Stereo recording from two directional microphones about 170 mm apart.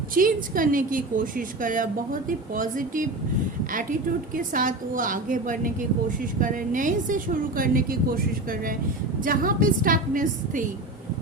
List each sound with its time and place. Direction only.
0.1 s a woman's voice: 55° right (ahead or behind)